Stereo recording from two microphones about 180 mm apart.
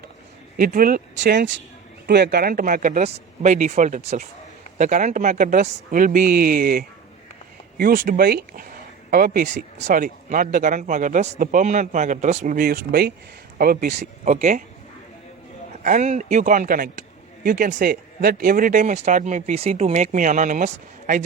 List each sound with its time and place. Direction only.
0.5 s speech: 50° right (ahead or behind)
1.1 s speech: 75° right (ahead or behind)
2.0 s speech: 65° right (ahead or behind)
13.8 s speech: 40° right (ahead or behind)
15.8 s speech: 45° right (ahead or behind)